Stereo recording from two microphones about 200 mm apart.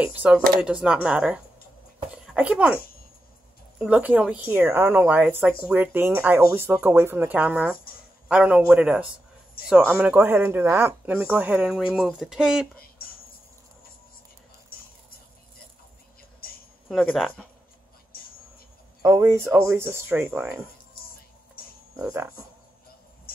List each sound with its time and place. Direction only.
0.0 s speech: 5° right (ahead or behind)
3.8 s speech: 5° right (ahead or behind)
14.7 s a sound: 45° left (ahead or behind)
16.9 s speech: centre (ahead or behind)
19.0 s speech: 15° right (ahead or behind)
21.9 s speech: 5° right (ahead or behind)